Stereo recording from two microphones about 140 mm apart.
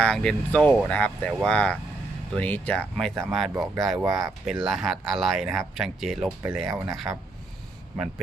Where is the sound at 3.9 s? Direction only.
25° right (ahead or behind).